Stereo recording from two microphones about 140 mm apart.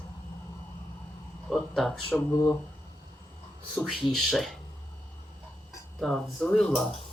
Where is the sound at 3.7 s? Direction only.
Centre (ahead or behind).